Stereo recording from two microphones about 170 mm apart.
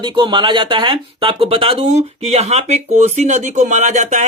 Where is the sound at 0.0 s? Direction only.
25° right (ahead or behind).